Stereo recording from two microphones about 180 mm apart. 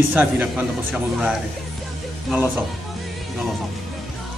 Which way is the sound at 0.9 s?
5° right (ahead or behind).